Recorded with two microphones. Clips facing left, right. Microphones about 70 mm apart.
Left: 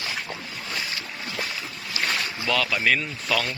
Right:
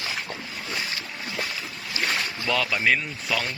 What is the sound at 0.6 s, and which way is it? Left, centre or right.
Boat, centre.